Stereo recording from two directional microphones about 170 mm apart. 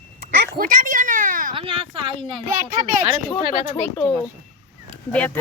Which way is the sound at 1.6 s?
30° right (ahead or behind).